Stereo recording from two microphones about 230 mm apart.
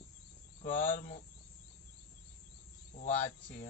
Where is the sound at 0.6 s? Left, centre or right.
Left.